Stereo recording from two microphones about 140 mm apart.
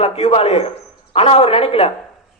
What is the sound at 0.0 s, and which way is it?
A man's voice, 45° left (ahead or behind).